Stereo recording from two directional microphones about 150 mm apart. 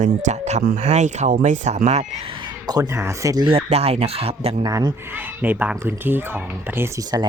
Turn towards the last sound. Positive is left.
turn(degrees=-25)  # may be behind; listen again after turning